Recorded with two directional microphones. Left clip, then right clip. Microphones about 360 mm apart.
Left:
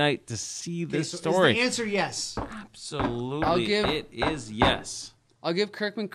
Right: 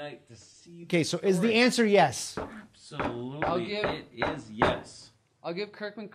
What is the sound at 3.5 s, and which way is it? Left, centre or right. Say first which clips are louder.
Speech: left 6 dB; left.